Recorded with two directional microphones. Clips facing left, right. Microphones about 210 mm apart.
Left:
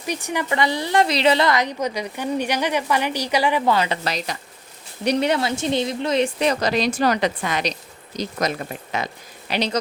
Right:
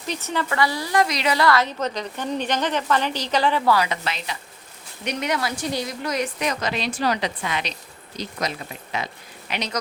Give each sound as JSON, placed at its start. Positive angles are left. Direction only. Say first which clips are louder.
{"t": 0.0, "sound": "a woman's voice", "louder": "left 1 dB", "side_deg": 15}
{"t": 3.8, "sound": "a woman's voice", "louder": "left 2 dB", "side_deg": 35}
{"t": 9.5, "sound": "a woman's voice", "louder": "left 6 dB", "side_deg": 30}